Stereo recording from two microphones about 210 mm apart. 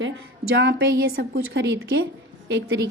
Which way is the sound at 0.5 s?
55° right (ahead or behind).